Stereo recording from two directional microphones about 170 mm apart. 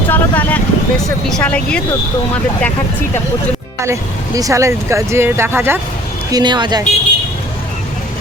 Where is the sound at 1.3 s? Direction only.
10° left (ahead or behind).